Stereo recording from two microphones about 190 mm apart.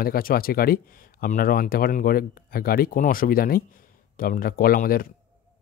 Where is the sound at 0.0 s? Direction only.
50° left (ahead or behind).